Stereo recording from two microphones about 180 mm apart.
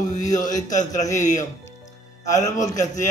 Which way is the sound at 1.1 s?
40° left (ahead or behind).